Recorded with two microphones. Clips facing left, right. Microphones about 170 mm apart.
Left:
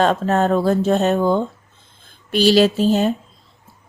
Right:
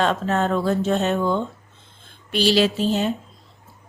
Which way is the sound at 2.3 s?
45° left (ahead or behind).